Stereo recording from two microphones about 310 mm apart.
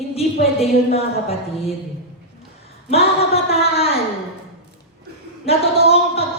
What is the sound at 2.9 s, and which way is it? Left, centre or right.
A woman's voice, centre.